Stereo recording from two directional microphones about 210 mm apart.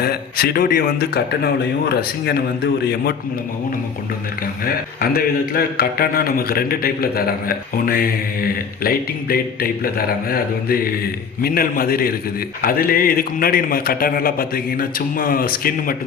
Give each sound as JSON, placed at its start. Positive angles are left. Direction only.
{"t": 0.0, "sound": "a man's voice", "side_deg": 45}
{"t": 4.6, "sound": "a man's voice", "side_deg": 45}